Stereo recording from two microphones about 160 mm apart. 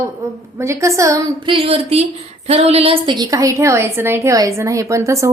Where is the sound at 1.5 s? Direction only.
35° right (ahead or behind); by 5.1 s 20° right (ahead or behind).